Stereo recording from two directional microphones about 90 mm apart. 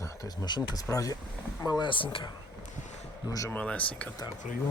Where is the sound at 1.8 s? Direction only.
70° left (ahead or behind).